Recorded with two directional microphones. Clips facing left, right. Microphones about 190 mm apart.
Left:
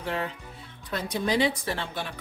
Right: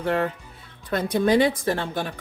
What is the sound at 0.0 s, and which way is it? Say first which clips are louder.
A woman's voice: right 7 dB; 55° right (ahead or behind).